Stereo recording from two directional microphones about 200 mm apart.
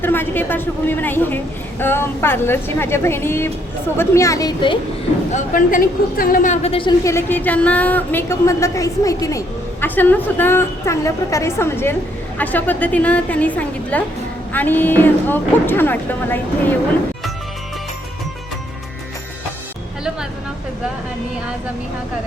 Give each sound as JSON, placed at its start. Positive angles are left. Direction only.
{"t": 0.0, "sound": "a woman's voice", "side_deg": 10}
{"t": 5.3, "sound": "a woman's voice", "side_deg": 45}
{"t": 7.0, "sound": "a woman's voice", "side_deg": 15}